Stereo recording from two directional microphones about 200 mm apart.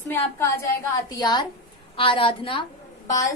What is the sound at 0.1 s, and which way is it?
A woman's voice, 15° left (ahead or behind).